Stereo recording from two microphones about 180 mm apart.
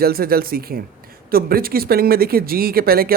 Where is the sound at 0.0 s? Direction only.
55° right (ahead or behind).